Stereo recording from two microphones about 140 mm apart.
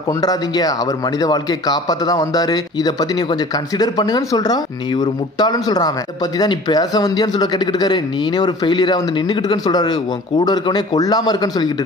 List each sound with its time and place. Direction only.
0.2 s speech: 25° left (ahead or behind)